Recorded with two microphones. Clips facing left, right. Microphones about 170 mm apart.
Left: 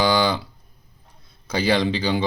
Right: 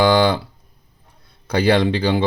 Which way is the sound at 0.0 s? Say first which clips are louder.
Right 5 dB; 55° right (ahead or behind).